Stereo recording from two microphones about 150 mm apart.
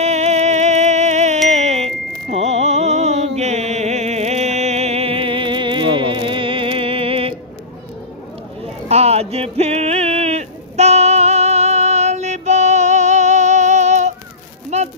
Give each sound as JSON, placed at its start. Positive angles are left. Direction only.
{"t": 0.0, "sound": "music", "side_deg": -50}
{"t": 8.8, "sound": "music", "side_deg": -45}
{"t": 14.7, "sound": "a sound", "side_deg": -50}